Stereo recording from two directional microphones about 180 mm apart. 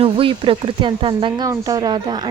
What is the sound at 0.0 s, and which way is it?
A woman's voice, 30° right (ahead or behind).